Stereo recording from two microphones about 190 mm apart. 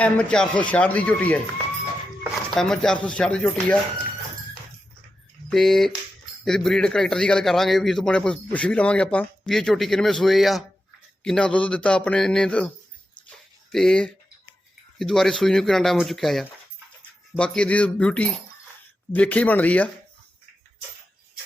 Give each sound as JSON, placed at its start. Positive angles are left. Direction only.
{"t": 0.0, "sound": "speech", "side_deg": 5}
{"t": 2.5, "sound": "a man's voice", "side_deg": 0}
{"t": 5.5, "sound": "a man's voice", "side_deg": 0}